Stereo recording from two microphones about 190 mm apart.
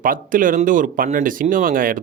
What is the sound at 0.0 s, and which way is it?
Speech, 45° right (ahead or behind).